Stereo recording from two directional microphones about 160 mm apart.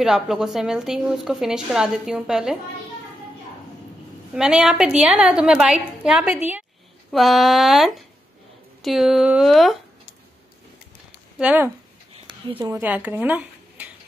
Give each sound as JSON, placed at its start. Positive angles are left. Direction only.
{"t": 0.0, "sound": "a woman's voice", "side_deg": -5}
{"t": 4.4, "sound": "a woman's voice", "side_deg": -5}
{"t": 11.3, "sound": "speech", "side_deg": -10}
{"t": 12.3, "sound": "a sound", "side_deg": -35}
{"t": 12.6, "sound": "speech", "side_deg": -15}